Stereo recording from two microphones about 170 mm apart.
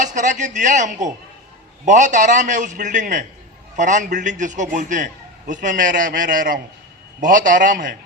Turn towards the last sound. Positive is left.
turn(degrees=-50)  # may be behind; listen again after turning